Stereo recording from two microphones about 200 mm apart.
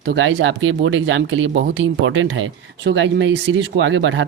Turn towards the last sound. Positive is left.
turn(degrees=-65)  # may be behind; listen again after turning